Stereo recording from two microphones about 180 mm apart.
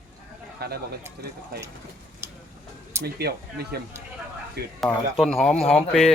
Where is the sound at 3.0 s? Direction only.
60° right (ahead or behind).